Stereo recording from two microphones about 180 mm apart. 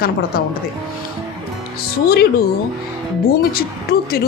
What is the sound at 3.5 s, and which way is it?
Speech, 60° left (ahead or behind).